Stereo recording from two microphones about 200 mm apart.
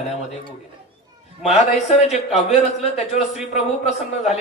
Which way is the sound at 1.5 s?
35° left (ahead or behind).